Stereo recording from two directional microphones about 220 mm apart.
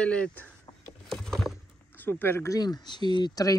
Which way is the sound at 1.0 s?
Centre (ahead or behind).